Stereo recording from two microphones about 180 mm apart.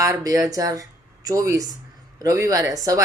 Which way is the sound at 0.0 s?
20° right (ahead or behind).